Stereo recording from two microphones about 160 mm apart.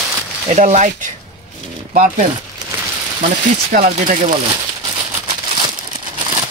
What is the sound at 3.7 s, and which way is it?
Speech, 50° right (ahead or behind).